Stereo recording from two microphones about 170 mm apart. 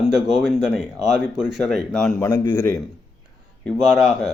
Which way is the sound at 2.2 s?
20° left (ahead or behind).